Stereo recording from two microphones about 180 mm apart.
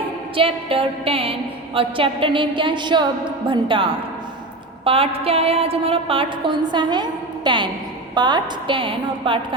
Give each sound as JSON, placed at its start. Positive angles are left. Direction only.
{"t": 0.3, "sound": "a woman's voice", "side_deg": -30}